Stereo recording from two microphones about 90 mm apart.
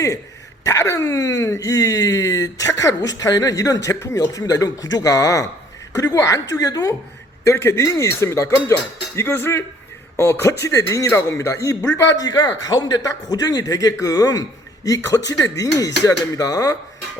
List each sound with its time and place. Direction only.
0.6 s speech: 35° left (ahead or behind)
7.4 s speech: 30° left (ahead or behind)